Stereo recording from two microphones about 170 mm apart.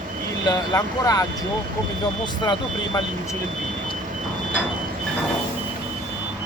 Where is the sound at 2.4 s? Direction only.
25° left (ahead or behind).